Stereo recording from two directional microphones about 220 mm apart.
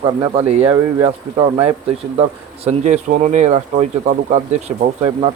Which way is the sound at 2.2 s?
30° right (ahead or behind).